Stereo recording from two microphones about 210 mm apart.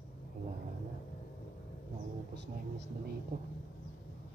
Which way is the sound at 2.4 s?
55° right (ahead or behind).